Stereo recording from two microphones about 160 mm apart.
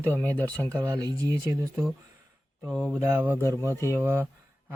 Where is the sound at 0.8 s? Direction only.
25° right (ahead or behind).